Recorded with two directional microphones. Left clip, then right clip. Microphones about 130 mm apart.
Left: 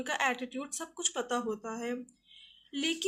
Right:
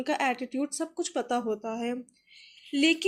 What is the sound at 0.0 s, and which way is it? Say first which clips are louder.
Speech: right 3 dB; 25° right (ahead or behind).